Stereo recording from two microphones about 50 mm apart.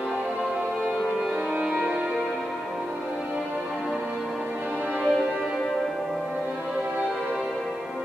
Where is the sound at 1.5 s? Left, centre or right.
Centre.